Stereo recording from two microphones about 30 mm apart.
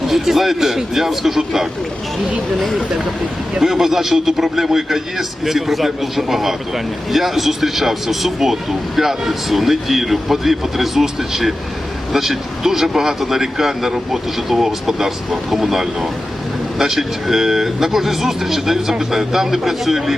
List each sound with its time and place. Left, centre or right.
0.1 s speech: centre
3.6 s speech: centre